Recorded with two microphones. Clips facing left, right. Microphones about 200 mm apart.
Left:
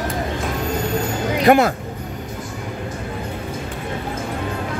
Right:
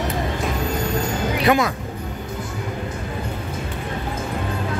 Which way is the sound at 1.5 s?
40° left (ahead or behind).